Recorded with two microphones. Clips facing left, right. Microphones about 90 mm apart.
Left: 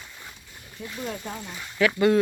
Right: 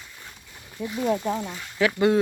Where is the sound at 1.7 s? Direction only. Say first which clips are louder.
Even; 20° right (ahead or behind).